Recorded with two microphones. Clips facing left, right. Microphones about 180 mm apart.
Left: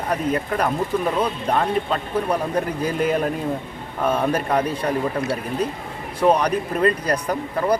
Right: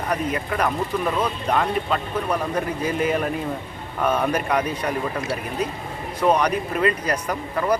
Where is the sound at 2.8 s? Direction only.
5° right (ahead or behind).